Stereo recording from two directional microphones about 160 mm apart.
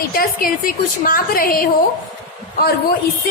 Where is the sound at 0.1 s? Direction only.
65° left (ahead or behind).